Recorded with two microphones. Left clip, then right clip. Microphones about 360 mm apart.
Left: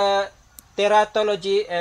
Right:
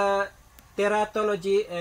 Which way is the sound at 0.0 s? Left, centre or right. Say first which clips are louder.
Left 4 dB; centre.